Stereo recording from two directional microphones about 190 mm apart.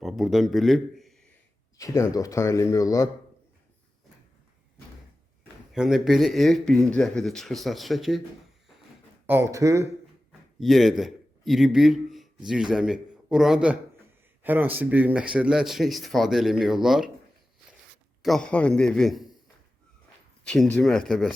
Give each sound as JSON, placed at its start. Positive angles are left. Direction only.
{"t": 0.0, "sound": "speech", "side_deg": 0}
{"t": 1.8, "sound": "speech", "side_deg": 15}
{"t": 5.7, "sound": "speech", "side_deg": 0}
{"t": 9.2, "sound": "speech", "side_deg": -15}
{"t": 10.6, "sound": "a man's voice", "side_deg": 0}
{"t": 18.2, "sound": "speech", "side_deg": 0}
{"t": 20.4, "sound": "speech", "side_deg": 5}